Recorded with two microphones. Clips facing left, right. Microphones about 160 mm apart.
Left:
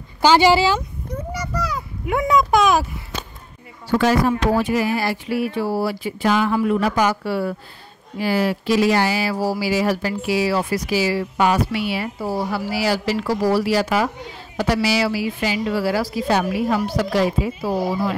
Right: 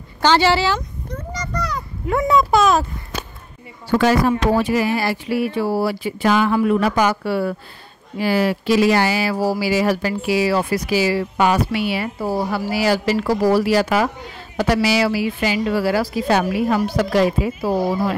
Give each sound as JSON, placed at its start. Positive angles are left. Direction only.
{"t": 0.2, "sound": "a child's voice", "side_deg": 10}
{"t": 4.7, "sound": "a sound", "side_deg": -90}
{"t": 8.2, "sound": "speech", "side_deg": -75}